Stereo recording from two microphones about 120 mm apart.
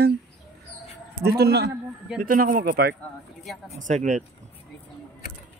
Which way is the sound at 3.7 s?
90° right.